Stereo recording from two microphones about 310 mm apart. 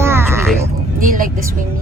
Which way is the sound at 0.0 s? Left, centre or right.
Centre.